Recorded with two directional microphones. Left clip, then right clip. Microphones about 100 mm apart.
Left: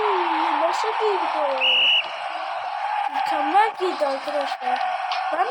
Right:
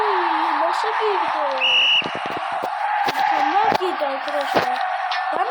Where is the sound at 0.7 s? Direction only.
20° right (ahead or behind).